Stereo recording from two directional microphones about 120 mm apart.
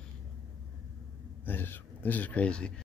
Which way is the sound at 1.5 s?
15° left (ahead or behind).